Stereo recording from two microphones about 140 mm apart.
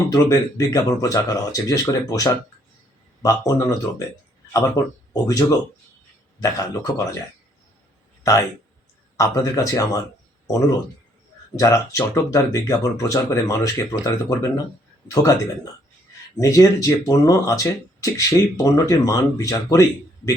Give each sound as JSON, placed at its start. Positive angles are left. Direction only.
{"t": 0.1, "sound": "speech", "side_deg": 25}
{"t": 8.2, "sound": "speech", "side_deg": 25}
{"t": 11.5, "sound": "speech", "side_deg": 25}
{"t": 16.4, "sound": "speech", "side_deg": 25}